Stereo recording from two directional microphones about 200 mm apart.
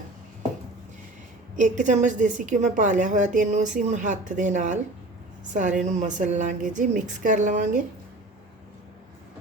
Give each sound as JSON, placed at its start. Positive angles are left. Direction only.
{"t": 1.5, "sound": "a woman's voice", "side_deg": -40}
{"t": 5.8, "sound": "a woman's voice", "side_deg": -35}